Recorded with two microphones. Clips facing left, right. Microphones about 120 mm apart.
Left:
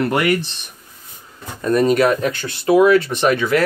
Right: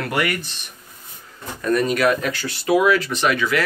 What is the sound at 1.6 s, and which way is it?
Speech, 30° left (ahead or behind).